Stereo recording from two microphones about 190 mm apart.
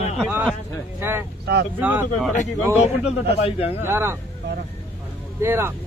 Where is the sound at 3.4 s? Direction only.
30° left (ahead or behind).